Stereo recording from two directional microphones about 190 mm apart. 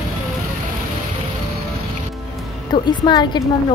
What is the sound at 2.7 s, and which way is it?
Speech, 25° left (ahead or behind).